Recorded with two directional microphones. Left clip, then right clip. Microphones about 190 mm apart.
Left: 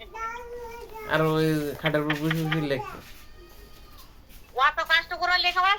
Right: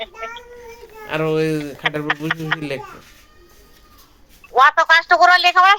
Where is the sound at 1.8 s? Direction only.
50° right (ahead or behind).